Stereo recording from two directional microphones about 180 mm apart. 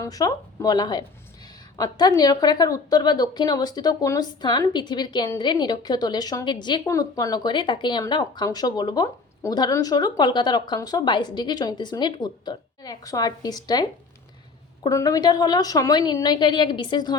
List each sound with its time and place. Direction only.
0.0 s a woman's voice: 20° left (ahead or behind)
14.8 s a woman's voice: 20° left (ahead or behind)